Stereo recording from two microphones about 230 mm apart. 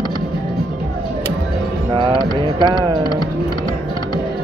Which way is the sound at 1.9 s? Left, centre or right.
Right.